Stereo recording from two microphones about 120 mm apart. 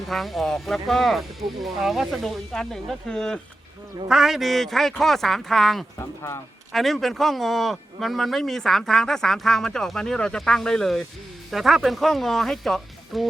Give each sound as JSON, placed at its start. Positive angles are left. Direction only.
{"t": 0.1, "sound": "speech", "side_deg": 0}
{"t": 6.0, "sound": "speech", "side_deg": 25}
{"t": 6.7, "sound": "speech", "side_deg": 0}